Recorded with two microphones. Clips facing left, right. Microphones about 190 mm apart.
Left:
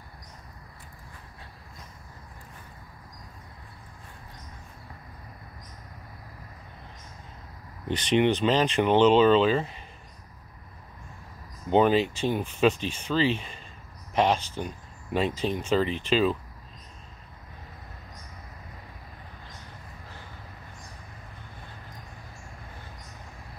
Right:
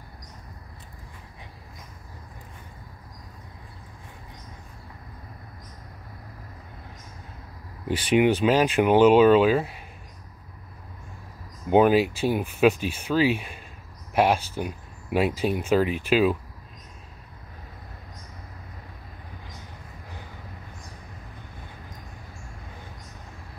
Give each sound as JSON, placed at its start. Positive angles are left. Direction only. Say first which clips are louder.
{"t": 7.9, "sound": "speech", "louder": "right 3 dB", "side_deg": -10}
{"t": 11.7, "sound": "speech", "louder": "right 3 dB", "side_deg": -10}